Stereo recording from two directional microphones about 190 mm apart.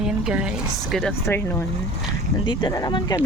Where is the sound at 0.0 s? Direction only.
5° right (ahead or behind).